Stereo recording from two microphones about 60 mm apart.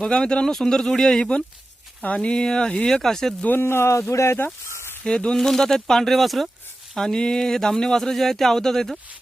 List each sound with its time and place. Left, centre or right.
0.0 s speech: centre
3.4 s speech: left
4.7 s a sound: left
5.0 s speech: centre